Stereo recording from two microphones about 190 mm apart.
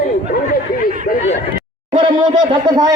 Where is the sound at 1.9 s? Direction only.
20° right (ahead or behind).